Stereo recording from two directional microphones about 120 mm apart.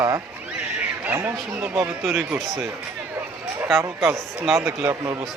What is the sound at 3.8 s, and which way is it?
Speech, 20° right (ahead or behind).